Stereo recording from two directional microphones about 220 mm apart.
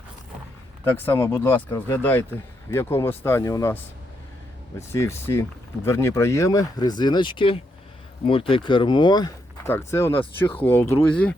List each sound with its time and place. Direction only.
0.9 s speech: 10° left (ahead or behind)
4.9 s speech: 10° left (ahead or behind)